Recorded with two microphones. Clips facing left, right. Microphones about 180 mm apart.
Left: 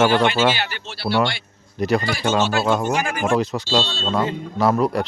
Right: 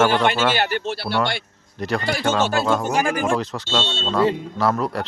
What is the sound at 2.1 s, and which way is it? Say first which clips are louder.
Speech: right 1 dB; 55° right (ahead or behind).